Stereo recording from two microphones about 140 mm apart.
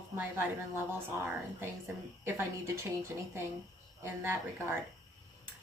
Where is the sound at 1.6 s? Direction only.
15° right (ahead or behind).